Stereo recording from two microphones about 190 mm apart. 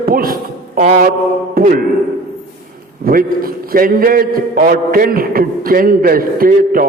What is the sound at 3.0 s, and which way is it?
A man's voice, 50° right (ahead or behind).